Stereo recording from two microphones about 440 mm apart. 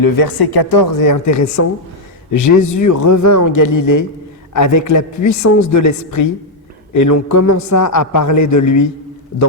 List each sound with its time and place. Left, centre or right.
0.0 s a man's voice: left